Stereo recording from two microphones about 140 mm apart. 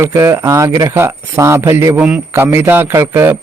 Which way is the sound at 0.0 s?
20° right (ahead or behind).